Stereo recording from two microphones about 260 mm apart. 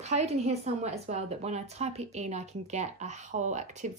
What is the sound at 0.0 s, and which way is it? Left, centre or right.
A woman's voice, right.